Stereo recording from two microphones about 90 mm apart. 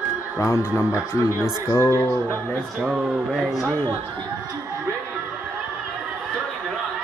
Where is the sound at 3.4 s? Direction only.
5° right (ahead or behind).